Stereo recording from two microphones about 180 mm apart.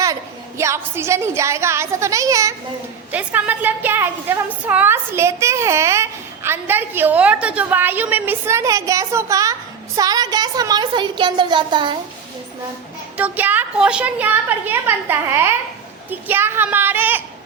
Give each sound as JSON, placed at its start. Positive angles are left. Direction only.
{"t": 0.0, "sound": "a woman's voice", "side_deg": -15}
{"t": 13.1, "sound": "a woman's voice", "side_deg": -10}